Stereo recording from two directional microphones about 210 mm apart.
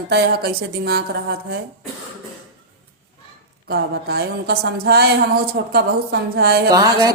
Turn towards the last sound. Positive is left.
turn(degrees=-20)  # may be behind; listen again after turning